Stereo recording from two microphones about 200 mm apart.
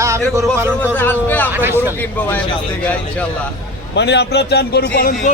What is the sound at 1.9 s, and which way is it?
A man's voice, 10° left (ahead or behind).